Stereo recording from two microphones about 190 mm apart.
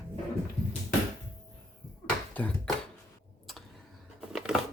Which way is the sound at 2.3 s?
10° left (ahead or behind).